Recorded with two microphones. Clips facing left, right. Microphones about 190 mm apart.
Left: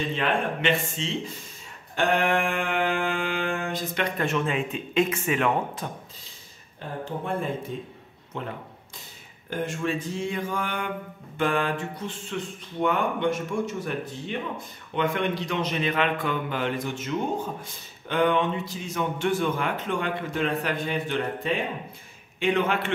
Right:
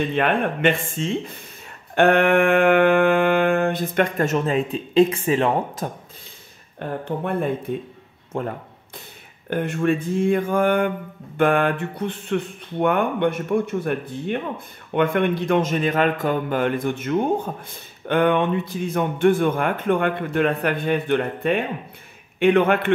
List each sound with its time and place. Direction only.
0.1 s a man's voice: 55° right (ahead or behind); by 5.9 s 30° right (ahead or behind)
6.8 s a man's voice: 60° right (ahead or behind)
8.3 s speech: 45° right (ahead or behind)
9.5 s a man's voice: 60° right (ahead or behind)